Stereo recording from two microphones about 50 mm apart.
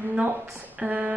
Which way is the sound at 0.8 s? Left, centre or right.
Right.